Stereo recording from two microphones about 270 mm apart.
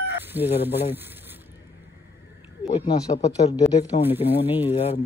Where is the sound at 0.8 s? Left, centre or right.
Centre.